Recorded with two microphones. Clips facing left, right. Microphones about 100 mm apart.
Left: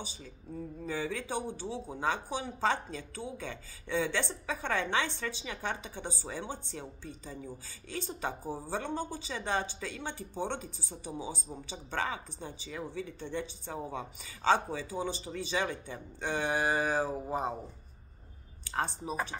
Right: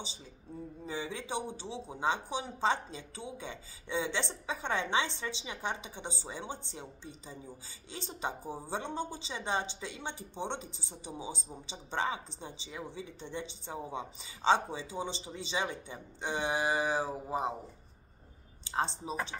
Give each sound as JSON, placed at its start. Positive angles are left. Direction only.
{"t": 0.8, "sound": "speech", "side_deg": -20}
{"t": 18.6, "sound": "a woman's voice", "side_deg": -20}